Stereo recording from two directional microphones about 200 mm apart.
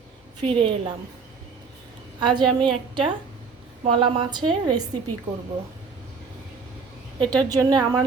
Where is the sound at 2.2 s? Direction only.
25° right (ahead or behind).